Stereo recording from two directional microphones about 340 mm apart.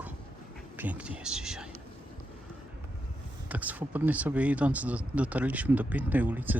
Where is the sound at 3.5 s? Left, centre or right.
Centre.